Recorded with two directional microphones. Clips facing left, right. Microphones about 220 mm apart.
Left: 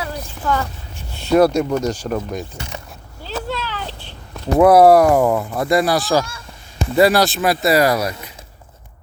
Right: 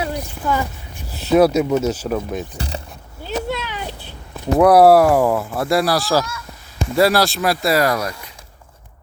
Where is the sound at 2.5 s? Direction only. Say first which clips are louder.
Right 3 dB; 35° right (ahead or behind).